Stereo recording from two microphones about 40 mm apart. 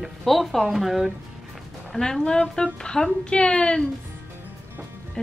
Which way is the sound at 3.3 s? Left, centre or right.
Left.